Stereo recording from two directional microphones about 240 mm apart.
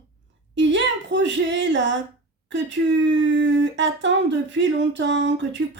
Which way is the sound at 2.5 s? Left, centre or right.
Right.